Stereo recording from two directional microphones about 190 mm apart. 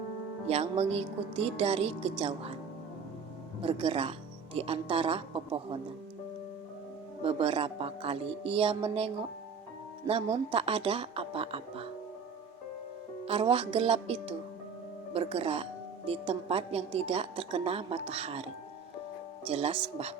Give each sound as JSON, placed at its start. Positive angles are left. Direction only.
{"t": 0.4, "sound": "a woman's voice", "side_deg": -35}
{"t": 3.6, "sound": "a woman's voice", "side_deg": -30}
{"t": 7.2, "sound": "speech", "side_deg": -30}
{"t": 13.2, "sound": "a woman's voice", "side_deg": -30}